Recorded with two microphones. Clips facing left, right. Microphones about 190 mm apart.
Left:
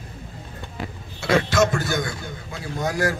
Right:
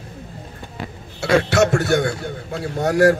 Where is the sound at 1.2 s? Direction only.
70° right (ahead or behind).